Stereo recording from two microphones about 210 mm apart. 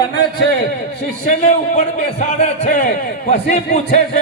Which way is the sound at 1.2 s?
35° left (ahead or behind).